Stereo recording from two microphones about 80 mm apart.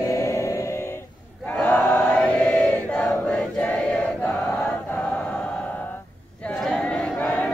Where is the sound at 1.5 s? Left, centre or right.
Centre.